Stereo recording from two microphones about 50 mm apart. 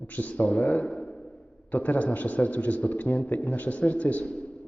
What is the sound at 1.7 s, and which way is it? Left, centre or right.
A man's voice, left.